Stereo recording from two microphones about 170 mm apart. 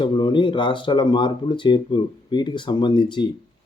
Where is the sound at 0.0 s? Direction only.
30° left (ahead or behind).